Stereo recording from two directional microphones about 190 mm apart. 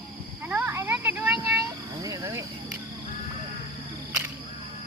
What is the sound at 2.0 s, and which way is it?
Cricket, 15° right (ahead or behind).